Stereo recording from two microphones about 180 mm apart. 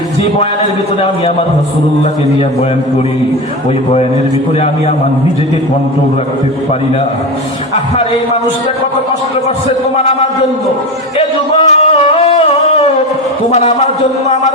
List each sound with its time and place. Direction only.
11.2 s music: 35° left (ahead or behind)
13.5 s speech: 35° left (ahead or behind)